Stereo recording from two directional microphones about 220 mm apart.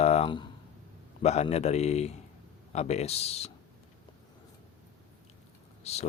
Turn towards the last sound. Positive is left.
turn(degrees=30)  # may be behind; listen again after turning